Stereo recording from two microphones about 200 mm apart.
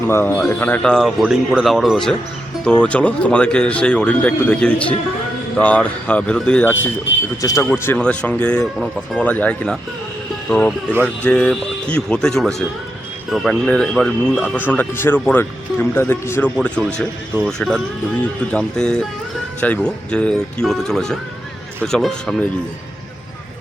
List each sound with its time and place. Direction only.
0.1 s speech: 10° left (ahead or behind)
14.7 s speech: 10° left (ahead or behind)